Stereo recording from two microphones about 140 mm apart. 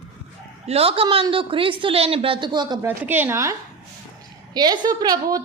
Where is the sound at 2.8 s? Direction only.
15° right (ahead or behind).